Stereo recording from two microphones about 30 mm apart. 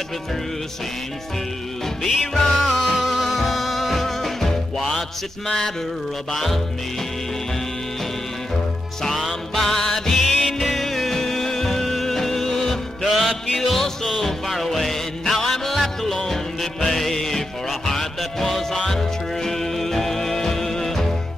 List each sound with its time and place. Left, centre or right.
2.0 s music: centre
6.3 s music: centre
9.0 s music: centre